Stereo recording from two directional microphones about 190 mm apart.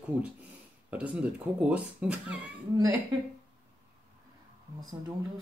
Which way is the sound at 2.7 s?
15° right (ahead or behind).